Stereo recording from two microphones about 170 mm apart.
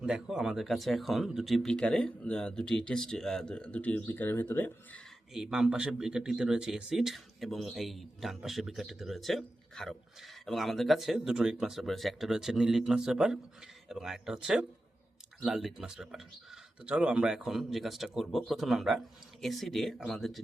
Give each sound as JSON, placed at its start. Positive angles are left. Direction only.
{"t": 0.0, "sound": "speech", "side_deg": -5}
{"t": 5.3, "sound": "speech", "side_deg": -5}